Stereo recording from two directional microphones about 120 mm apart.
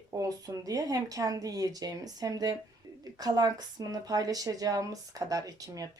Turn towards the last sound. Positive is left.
turn(degrees=-30)  # may be behind; listen again after turning